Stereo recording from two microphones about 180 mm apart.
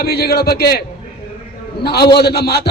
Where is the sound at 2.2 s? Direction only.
65° left (ahead or behind).